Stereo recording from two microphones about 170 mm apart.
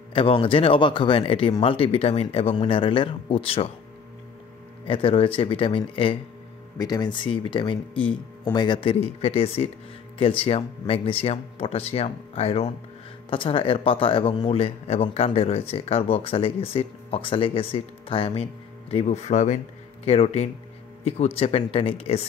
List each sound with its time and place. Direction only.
0.1 s a man's voice: 30° left (ahead or behind)
4.8 s a man's voice: 35° left (ahead or behind)